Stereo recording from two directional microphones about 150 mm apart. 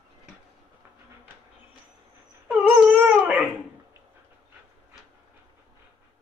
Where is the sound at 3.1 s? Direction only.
10° right (ahead or behind).